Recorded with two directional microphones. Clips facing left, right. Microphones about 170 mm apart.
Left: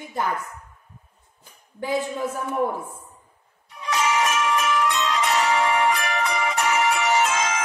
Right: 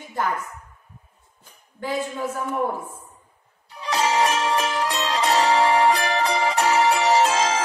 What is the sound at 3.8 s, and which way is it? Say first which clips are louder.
Music: right 2 dB; 30° right (ahead or behind).